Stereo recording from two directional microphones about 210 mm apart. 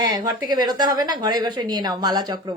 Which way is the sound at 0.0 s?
20° right (ahead or behind).